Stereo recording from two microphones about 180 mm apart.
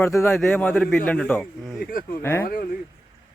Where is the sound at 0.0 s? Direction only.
15° left (ahead or behind).